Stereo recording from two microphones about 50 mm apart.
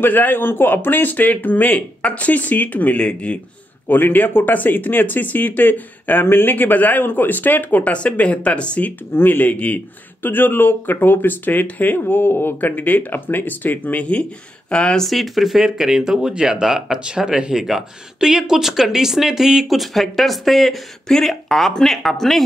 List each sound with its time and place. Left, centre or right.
0.0 s speech: left
3.9 s speech: left
9.1 s speech: left
14.7 s speech: centre
15.0 s speech: centre